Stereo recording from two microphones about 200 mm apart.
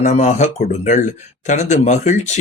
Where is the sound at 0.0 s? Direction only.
35° left (ahead or behind).